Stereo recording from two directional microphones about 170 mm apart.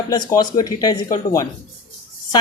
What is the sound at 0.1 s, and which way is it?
Speech, 20° left (ahead or behind).